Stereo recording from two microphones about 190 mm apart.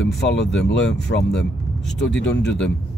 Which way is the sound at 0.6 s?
65° left (ahead or behind).